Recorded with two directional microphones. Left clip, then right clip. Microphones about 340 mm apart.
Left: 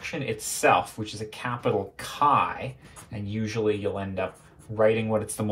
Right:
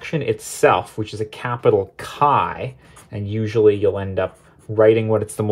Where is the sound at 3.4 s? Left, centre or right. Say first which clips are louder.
Right 12 dB; right.